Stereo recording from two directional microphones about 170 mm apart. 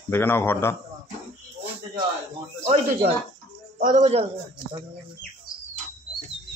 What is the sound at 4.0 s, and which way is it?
Speech, 35° right (ahead or behind).